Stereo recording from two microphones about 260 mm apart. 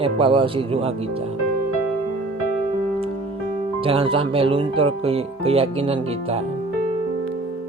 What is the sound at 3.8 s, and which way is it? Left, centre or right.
Speech, right.